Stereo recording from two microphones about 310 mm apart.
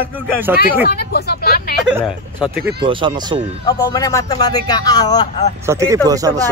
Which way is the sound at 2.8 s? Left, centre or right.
Centre.